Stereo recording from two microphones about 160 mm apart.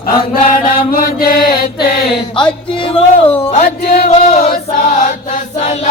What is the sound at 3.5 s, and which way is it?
Music, 55° left (ahead or behind).